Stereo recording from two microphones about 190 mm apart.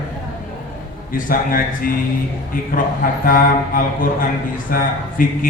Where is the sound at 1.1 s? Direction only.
45° left (ahead or behind).